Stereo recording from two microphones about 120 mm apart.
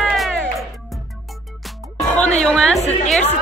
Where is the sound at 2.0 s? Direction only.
10° left (ahead or behind).